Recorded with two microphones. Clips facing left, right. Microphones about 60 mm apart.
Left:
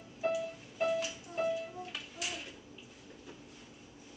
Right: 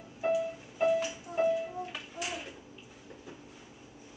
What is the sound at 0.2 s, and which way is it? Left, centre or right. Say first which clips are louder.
Music: right 4 dB; centre.